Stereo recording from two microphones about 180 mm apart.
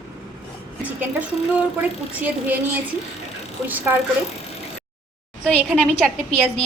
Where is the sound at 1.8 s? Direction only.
10° right (ahead or behind).